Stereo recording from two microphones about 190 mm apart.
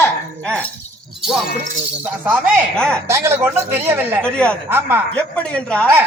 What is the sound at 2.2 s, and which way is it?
Speech, 10° right (ahead or behind).